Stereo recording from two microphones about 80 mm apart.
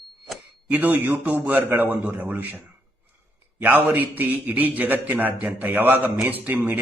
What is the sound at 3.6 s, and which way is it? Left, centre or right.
A man's voice, right.